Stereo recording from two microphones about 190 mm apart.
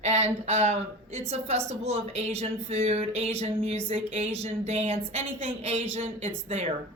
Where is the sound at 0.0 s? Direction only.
35° right (ahead or behind).